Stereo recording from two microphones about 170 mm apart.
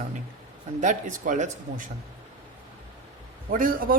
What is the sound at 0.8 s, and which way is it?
Speech, 50° right (ahead or behind).